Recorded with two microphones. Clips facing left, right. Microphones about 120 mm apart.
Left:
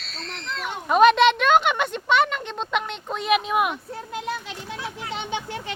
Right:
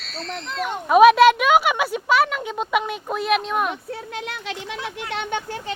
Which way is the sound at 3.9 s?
80° right.